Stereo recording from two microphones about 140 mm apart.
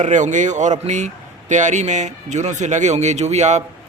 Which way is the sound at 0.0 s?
60° right (ahead or behind).